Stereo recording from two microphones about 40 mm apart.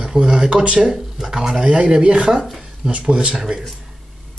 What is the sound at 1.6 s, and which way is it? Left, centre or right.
Speech, right.